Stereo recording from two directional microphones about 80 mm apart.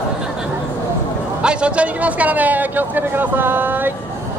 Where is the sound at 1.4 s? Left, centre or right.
Centre.